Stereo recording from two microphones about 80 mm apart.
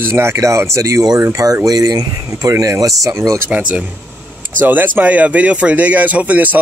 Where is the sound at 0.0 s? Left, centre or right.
Right.